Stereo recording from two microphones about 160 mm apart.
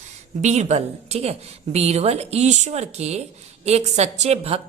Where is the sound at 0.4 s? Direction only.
45° right (ahead or behind).